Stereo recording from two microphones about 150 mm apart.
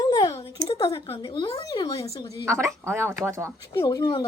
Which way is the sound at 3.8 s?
30° left (ahead or behind).